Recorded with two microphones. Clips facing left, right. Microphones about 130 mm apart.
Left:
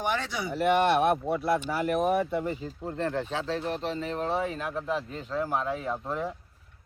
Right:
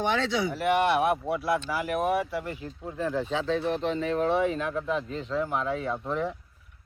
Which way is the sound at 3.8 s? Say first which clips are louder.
Right 4 dB; 30° left (ahead or behind).